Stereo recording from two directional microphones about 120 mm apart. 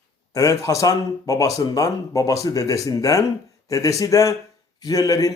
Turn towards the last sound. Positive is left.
turn(degrees=30)  # may be behind; listen again after turning